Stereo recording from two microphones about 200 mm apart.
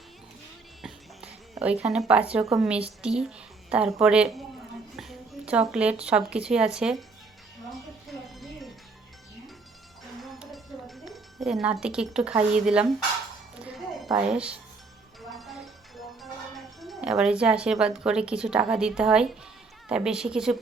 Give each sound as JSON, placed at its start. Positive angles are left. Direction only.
{"t": 0.8, "sound": "a sound", "side_deg": -5}
{"t": 2.6, "sound": "speech", "side_deg": -5}
{"t": 7.7, "sound": "music", "side_deg": 0}
{"t": 10.2, "sound": "wind chime", "side_deg": 0}
{"t": 13.7, "sound": "a sound", "side_deg": 0}
{"t": 14.3, "sound": "speech", "side_deg": -5}
{"t": 15.3, "sound": "music", "side_deg": 0}
{"t": 16.8, "sound": "speech", "side_deg": 0}